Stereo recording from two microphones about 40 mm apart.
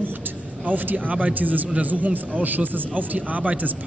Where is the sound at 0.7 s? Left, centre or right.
Right.